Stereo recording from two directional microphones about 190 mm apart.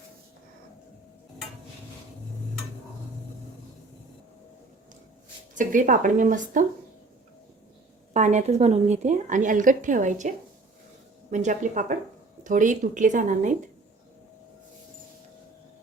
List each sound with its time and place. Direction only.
5.5 s speech: 45° right (ahead or behind)
8.1 s a woman's voice: 40° right (ahead or behind)